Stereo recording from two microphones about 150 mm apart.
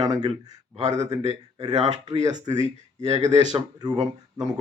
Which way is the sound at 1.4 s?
25° right (ahead or behind).